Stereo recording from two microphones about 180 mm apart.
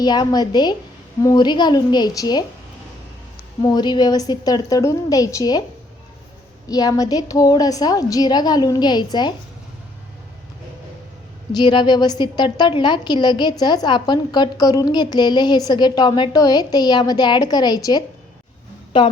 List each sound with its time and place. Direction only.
0.0 s a woman's voice: 20° left (ahead or behind)
3.6 s a woman's voice: 25° left (ahead or behind)
6.7 s a woman's voice: 20° left (ahead or behind)
11.5 s a woman's voice: 25° left (ahead or behind)